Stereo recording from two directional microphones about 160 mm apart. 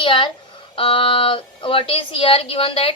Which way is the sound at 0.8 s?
35° left (ahead or behind).